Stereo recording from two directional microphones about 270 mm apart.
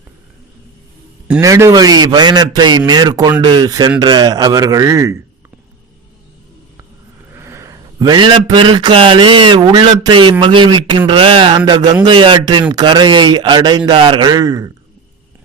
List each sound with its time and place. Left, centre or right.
1.3 s a man's voice: centre
7.3 s a man's voice: centre